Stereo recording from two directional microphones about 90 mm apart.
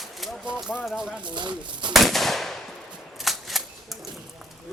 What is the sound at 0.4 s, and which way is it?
Speech, 10° right (ahead or behind).